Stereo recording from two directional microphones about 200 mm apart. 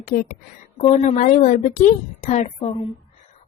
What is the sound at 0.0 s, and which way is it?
Speech, 45° left (ahead or behind).